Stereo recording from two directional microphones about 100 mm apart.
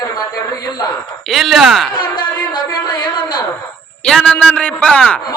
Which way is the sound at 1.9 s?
50° left (ahead or behind).